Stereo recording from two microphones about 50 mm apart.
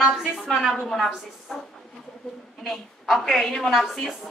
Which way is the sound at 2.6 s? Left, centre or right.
Centre.